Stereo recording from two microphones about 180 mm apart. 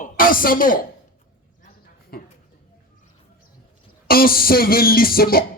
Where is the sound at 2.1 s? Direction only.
60° left (ahead or behind).